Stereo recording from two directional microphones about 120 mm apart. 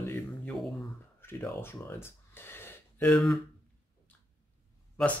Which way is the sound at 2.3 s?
20° left (ahead or behind).